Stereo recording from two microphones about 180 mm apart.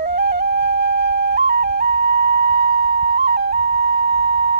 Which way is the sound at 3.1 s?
60° right (ahead or behind).